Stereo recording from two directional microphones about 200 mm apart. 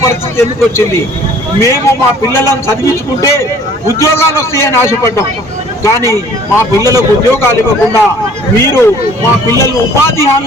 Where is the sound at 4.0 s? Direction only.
15° left (ahead or behind).